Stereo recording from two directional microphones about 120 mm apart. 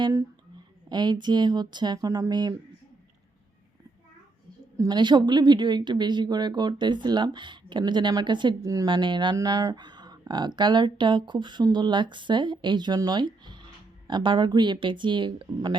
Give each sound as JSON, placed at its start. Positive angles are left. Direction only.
{"t": 0.9, "sound": "speech", "side_deg": -35}
{"t": 4.8, "sound": "speech", "side_deg": -40}
{"t": 8.6, "sound": "speech", "side_deg": -30}
{"t": 8.9, "sound": "speech", "side_deg": -40}